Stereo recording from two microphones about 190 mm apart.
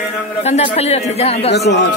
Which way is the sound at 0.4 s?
35° left (ahead or behind).